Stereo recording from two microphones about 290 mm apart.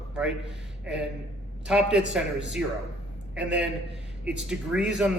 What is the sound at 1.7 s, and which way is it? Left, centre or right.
Speech, centre.